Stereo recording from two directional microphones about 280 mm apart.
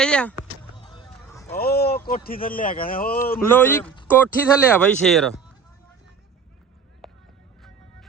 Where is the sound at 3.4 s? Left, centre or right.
Centre.